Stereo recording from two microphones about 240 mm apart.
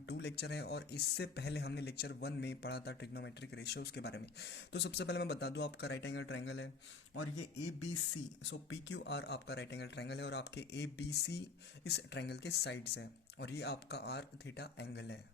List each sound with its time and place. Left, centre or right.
0.1 s speech: left
8.4 s speech: left